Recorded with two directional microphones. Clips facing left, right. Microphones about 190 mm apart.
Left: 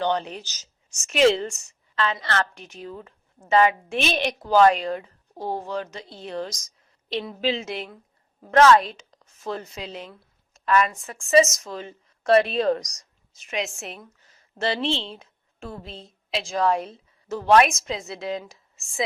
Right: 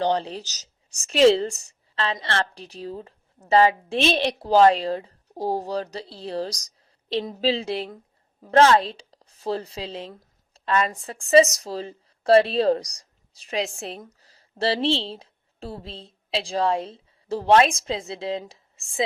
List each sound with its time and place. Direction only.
0.0 s a woman's voice: 30° right (ahead or behind)